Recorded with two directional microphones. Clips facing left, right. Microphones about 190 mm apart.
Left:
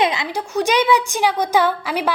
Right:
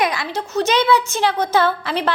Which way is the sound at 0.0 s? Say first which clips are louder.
Left 1 dB; 20° left (ahead or behind).